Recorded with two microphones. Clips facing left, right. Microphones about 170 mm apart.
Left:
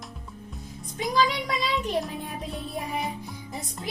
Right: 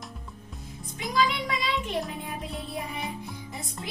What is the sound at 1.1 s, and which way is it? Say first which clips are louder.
Child singing: left 1 dB; 40° left (ahead or behind).